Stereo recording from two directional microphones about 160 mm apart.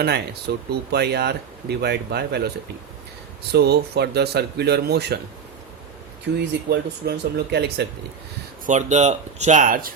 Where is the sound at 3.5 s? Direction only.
90° right.